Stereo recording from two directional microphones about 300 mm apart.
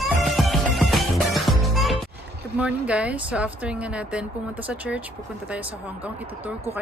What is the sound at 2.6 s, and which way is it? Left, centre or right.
Speech, centre.